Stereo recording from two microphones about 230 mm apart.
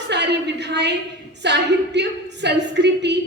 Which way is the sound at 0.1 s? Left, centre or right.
Right.